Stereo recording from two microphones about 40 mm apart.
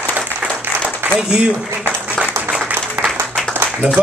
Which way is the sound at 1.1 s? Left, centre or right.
Right.